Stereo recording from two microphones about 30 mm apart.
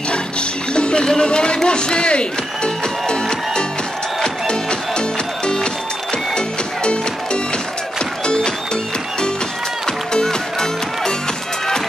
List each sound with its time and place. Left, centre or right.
0.1 s music: left
10.2 s music: centre